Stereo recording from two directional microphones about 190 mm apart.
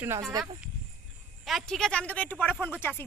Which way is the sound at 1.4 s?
Centre (ahead or behind).